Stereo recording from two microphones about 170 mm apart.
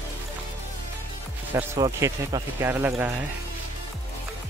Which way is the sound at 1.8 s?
20° right (ahead or behind).